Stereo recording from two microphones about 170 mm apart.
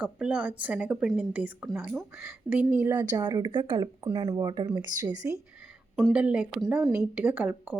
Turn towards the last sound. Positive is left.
turn(degrees=-10)  # may be behind; listen again after turning